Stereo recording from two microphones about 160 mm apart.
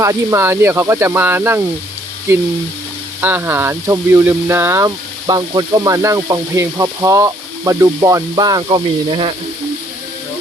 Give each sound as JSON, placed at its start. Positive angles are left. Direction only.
{"t": 0.0, "sound": "speech", "side_deg": -20}
{"t": 3.2, "sound": "speech", "side_deg": -15}